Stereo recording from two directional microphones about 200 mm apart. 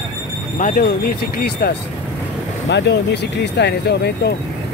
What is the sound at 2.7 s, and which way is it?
Speech, 60° left (ahead or behind).